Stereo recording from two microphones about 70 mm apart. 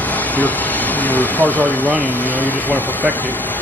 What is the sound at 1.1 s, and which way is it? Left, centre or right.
Speech, left.